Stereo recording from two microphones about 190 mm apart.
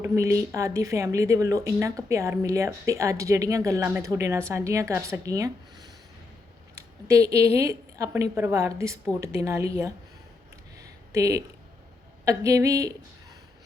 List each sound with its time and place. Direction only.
0.0 s a woman's voice: 15° right (ahead or behind)
11.1 s speech: 15° right (ahead or behind)